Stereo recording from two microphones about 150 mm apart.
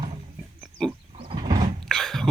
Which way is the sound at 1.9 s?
5° left (ahead or behind).